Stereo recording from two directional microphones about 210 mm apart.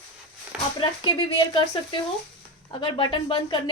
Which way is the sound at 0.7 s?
20° left (ahead or behind).